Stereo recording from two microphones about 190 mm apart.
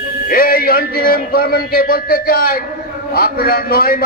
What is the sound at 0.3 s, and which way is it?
A man's voice, 50° left (ahead or behind).